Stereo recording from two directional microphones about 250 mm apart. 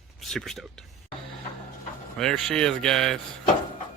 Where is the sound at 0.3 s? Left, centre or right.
Centre.